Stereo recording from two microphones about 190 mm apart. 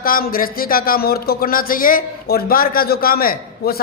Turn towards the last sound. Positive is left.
turn(degrees=50)  # may be behind; listen again after turning